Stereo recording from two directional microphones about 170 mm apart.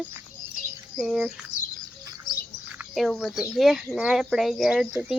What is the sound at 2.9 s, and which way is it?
Speech, centre (ahead or behind).